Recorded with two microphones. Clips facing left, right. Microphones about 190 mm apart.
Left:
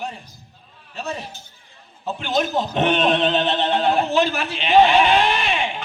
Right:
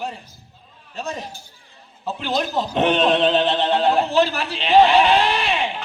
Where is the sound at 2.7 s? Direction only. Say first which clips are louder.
Right 2 dB; 35° right (ahead or behind).